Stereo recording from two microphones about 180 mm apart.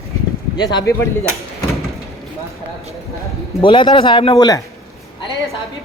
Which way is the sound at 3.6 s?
25° left (ahead or behind).